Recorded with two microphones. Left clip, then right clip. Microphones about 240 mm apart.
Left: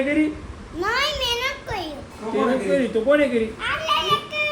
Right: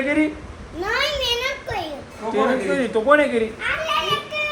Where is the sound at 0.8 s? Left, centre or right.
Centre.